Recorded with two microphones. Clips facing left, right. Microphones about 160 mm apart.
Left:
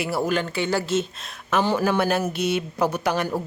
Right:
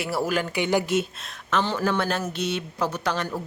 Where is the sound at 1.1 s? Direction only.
Centre (ahead or behind).